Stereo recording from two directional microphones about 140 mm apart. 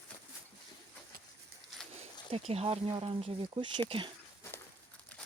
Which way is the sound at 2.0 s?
45° right (ahead or behind).